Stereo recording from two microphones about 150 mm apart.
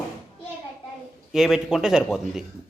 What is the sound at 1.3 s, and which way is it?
Speech, 5° right (ahead or behind).